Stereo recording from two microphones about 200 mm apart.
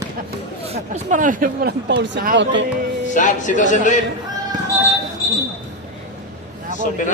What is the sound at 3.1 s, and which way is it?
Speech, 40° left (ahead or behind).